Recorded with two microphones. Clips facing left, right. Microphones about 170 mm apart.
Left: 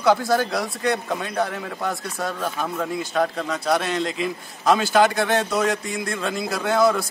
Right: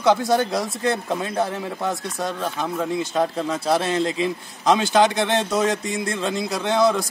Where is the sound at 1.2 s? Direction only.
30° right (ahead or behind).